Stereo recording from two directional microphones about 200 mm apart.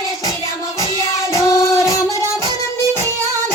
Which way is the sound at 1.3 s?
15° left (ahead or behind).